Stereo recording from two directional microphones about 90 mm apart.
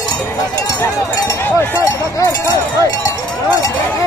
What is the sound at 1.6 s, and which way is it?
Speech, 40° left (ahead or behind).